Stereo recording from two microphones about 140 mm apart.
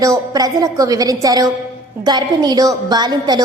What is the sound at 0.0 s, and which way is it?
A woman's voice, 25° right (ahead or behind).